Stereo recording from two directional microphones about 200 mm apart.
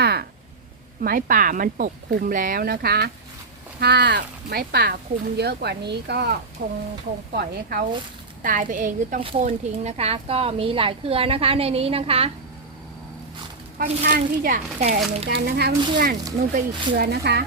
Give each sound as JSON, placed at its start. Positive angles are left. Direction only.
{"t": 0.0, "sound": "a sound", "side_deg": -55}
{"t": 1.0, "sound": "a woman's voice", "side_deg": -45}
{"t": 14.0, "sound": "speech", "side_deg": -45}
{"t": 15.3, "sound": "speech", "side_deg": -55}